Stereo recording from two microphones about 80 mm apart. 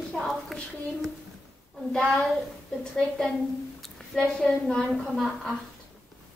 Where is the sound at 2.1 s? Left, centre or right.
Centre.